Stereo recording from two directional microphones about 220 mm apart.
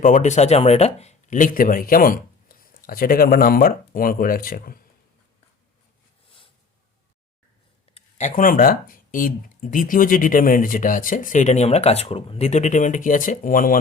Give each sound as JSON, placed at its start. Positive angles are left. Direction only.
{"t": 0.0, "sound": "speech", "side_deg": 35}
{"t": 7.9, "sound": "speech", "side_deg": 35}